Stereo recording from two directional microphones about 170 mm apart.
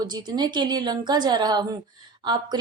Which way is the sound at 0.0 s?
25° right (ahead or behind).